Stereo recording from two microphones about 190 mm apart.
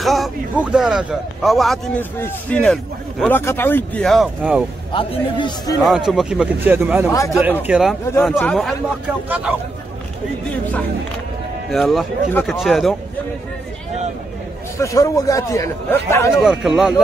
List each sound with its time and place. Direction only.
0.0 s speech: centre (ahead or behind)
4.9 s a man's voice: 25° left (ahead or behind)
5.8 s speech: centre (ahead or behind)
7.1 s speech: 15° left (ahead or behind)
7.6 s speech: 5° right (ahead or behind)
8.1 s speech: 5° left (ahead or behind)
11.7 s speech: centre (ahead or behind)
14.8 s speech: 20° left (ahead or behind)
16.4 s speech: 5° right (ahead or behind)